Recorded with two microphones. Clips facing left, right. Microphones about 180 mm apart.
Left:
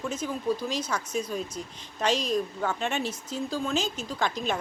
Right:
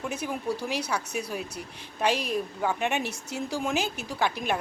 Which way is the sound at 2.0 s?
10° right (ahead or behind).